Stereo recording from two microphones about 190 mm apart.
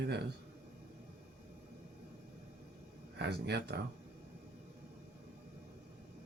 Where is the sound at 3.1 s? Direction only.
60° right (ahead or behind).